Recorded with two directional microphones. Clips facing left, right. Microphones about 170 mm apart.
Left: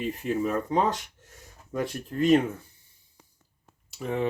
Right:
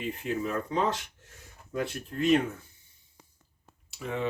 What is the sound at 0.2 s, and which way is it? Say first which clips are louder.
Speech: left 4 dB; 45° left (ahead or behind).